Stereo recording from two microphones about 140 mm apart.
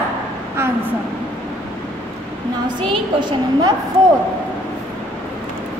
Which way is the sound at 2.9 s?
35° right (ahead or behind).